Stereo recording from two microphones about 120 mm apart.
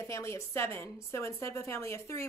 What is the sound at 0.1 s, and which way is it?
A woman's voice, 20° left (ahead or behind).